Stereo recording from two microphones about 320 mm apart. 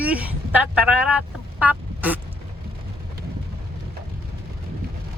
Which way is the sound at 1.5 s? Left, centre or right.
Centre.